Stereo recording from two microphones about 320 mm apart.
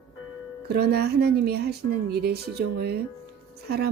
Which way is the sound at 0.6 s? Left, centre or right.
Right.